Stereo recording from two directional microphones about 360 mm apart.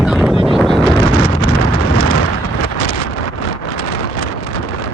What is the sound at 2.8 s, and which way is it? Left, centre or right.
Wind noise, left.